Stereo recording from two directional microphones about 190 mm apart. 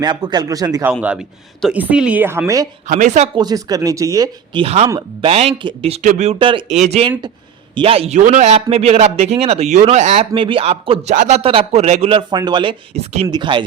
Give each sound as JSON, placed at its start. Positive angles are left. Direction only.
{"t": 0.0, "sound": "speech", "side_deg": -20}
{"t": 1.6, "sound": "a woman's voice", "side_deg": -5}
{"t": 2.8, "sound": "speech", "side_deg": -40}
{"t": 3.3, "sound": "speech", "side_deg": -20}
{"t": 4.6, "sound": "speech", "side_deg": -35}